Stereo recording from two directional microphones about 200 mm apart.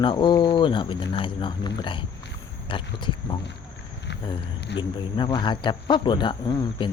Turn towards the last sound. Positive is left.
turn(degrees=25)  # may be behind; listen again after turning